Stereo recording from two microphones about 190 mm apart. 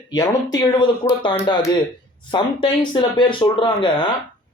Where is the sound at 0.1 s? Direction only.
20° left (ahead or behind).